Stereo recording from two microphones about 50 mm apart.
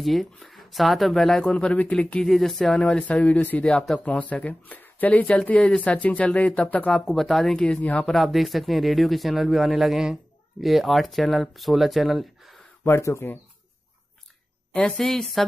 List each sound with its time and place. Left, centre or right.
0.0 s speech: centre
1.5 s speech: left
2.2 s a woman's voice: centre
3.0 s speech: left
7.1 s speech: centre
7.5 s speech: centre
7.8 s speech: left
8.1 s speech: centre
13.2 s speech: left
14.8 s a woman's voice: centre